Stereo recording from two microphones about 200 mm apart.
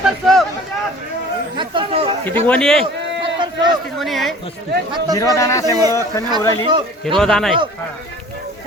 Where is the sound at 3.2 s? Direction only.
25° right (ahead or behind).